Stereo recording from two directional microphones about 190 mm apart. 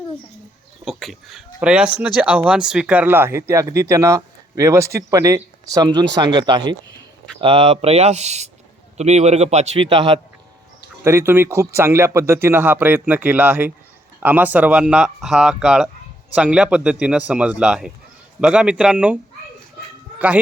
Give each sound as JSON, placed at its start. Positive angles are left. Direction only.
{"t": 0.9, "sound": "a man's voice", "side_deg": 0}
{"t": 11.0, "sound": "speech", "side_deg": -15}